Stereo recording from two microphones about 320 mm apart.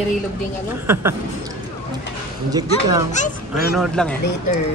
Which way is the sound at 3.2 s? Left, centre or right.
Left.